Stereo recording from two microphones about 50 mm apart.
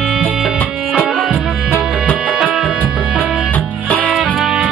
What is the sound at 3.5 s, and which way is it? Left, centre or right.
Music, left.